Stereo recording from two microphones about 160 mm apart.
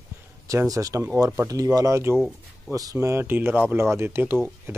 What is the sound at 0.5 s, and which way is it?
Speech, 20° right (ahead or behind).